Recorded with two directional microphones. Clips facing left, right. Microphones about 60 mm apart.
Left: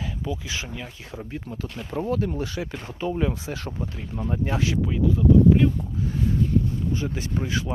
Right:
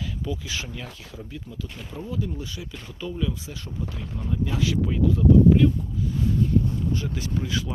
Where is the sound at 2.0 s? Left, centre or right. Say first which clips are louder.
Left 6 dB; left.